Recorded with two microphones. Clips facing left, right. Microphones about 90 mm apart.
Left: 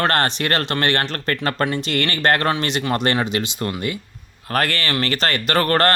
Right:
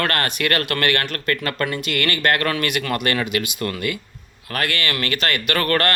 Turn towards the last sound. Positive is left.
turn(degrees=35)  # may be behind; listen again after turning